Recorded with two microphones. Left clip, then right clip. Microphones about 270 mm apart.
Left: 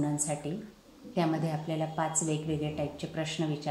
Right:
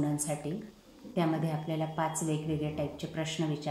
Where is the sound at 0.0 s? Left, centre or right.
Centre.